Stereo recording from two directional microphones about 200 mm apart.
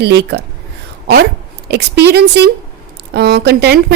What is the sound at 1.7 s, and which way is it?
A woman's voice, 55° right (ahead or behind).